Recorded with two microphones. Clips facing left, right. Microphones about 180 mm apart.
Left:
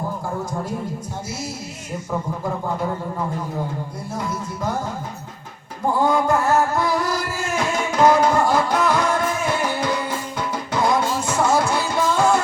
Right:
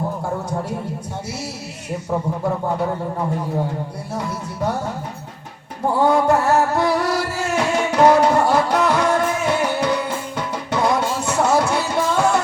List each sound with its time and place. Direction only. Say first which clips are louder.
4.1 s music: even; 65° right (ahead or behind)
6.0 s music: right 3 dB; 65° right (ahead or behind)